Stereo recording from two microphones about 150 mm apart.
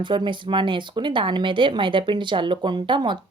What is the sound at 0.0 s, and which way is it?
A woman's voice, 30° right (ahead or behind).